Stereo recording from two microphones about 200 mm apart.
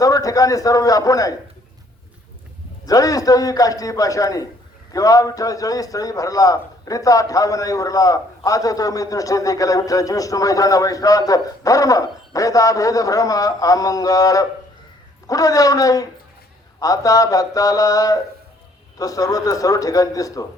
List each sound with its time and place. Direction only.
0.0 s a man's voice: 15° left (ahead or behind)
2.8 s a man's voice: 20° left (ahead or behind)